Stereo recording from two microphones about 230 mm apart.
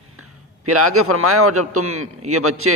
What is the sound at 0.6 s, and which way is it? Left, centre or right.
Speech, right.